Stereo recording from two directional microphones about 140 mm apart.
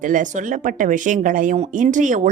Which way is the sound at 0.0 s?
65° right (ahead or behind).